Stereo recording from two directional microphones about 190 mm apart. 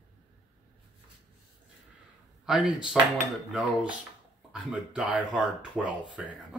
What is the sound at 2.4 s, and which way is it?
Speech, 5° right (ahead or behind).